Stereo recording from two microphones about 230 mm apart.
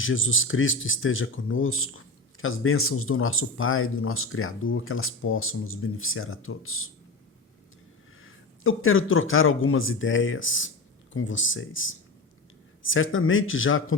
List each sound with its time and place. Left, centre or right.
0.0 s speech: left
8.2 s speech: left